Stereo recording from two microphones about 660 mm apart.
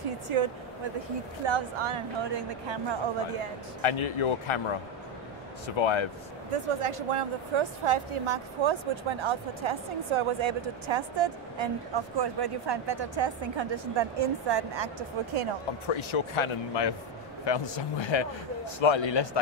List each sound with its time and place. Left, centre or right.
1.4 s speech: right
3.8 s a man's voice: left
5.8 s a man's voice: left
6.5 s speech: right
15.9 s a man's voice: left